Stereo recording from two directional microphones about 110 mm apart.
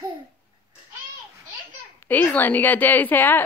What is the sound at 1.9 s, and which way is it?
A woman's voice, 15° left (ahead or behind).